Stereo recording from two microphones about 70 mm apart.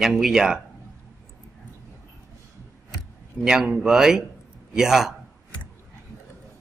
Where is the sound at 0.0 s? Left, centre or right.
Centre.